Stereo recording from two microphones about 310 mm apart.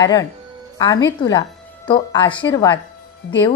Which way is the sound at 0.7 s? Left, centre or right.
Centre.